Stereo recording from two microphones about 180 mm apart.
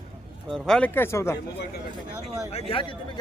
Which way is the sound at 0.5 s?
5° left (ahead or behind).